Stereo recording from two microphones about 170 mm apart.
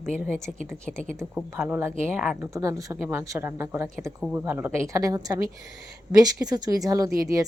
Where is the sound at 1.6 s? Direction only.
10° right (ahead or behind).